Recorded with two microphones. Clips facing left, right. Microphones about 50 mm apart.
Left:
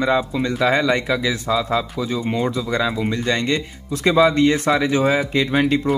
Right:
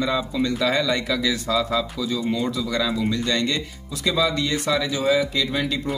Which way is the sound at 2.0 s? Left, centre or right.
Left.